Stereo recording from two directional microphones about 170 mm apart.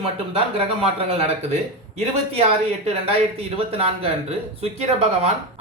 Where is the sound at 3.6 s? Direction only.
35° right (ahead or behind).